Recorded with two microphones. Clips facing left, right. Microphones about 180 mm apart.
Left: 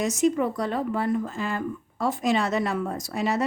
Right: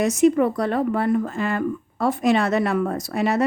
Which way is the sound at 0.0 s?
60° right (ahead or behind).